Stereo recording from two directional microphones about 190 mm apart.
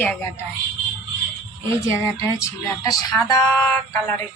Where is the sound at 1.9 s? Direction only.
15° left (ahead or behind).